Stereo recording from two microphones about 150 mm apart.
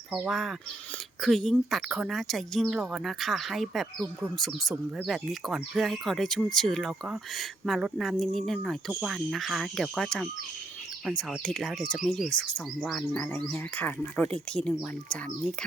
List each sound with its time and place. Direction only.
0.1 s speech: 5° right (ahead or behind)